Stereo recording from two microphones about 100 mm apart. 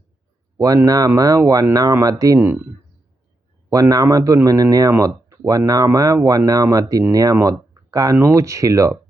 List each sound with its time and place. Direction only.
0.5 s speech: 35° right (ahead or behind)
2.4 s speech: 20° right (ahead or behind)
3.7 s speech: 35° right (ahead or behind)